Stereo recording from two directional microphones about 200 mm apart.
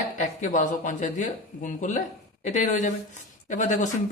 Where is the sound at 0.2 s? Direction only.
40° left (ahead or behind).